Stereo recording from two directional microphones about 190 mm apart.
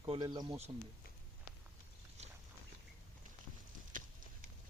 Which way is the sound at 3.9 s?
45° right (ahead or behind).